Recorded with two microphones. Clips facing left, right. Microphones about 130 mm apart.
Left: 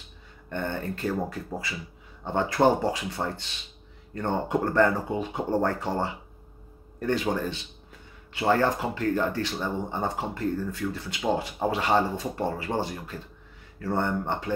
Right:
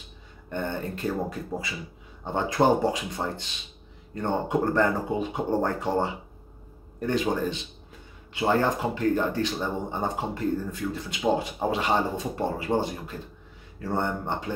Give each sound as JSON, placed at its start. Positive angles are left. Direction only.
{"t": 0.5, "sound": "speech", "side_deg": -20}
{"t": 2.2, "sound": "speech", "side_deg": -15}